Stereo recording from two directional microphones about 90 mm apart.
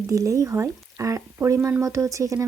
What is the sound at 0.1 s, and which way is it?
Speech, 35° right (ahead or behind).